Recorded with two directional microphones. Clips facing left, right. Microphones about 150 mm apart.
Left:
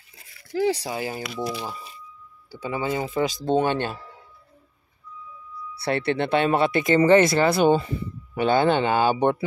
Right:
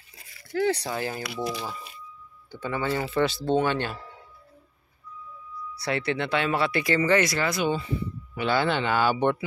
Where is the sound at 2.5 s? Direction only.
10° left (ahead or behind).